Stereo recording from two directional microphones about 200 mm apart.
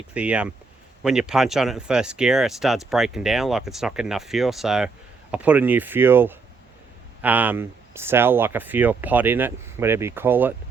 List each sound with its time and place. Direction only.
0.1 s speech: 5° right (ahead or behind)